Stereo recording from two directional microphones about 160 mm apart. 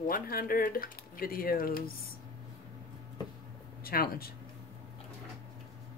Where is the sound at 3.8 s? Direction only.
70° left (ahead or behind).